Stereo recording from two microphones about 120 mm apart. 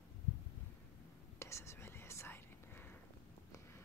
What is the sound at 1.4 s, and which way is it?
Whispering, 25° left (ahead or behind).